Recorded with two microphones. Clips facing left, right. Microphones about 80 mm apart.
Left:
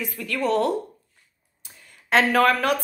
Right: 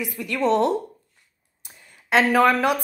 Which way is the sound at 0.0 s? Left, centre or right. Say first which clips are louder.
Right 2 dB; centre.